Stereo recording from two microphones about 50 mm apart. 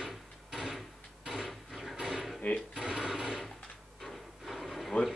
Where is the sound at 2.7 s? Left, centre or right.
Centre.